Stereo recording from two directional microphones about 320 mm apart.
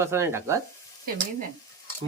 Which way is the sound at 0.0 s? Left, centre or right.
Centre.